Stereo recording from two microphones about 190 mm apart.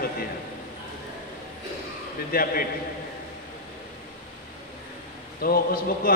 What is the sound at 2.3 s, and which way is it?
Speech, 50° left (ahead or behind).